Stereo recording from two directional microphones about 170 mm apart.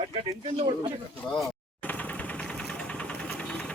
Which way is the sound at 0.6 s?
35° right (ahead or behind).